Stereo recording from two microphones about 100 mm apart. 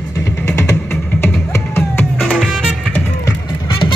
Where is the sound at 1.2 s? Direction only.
25° left (ahead or behind).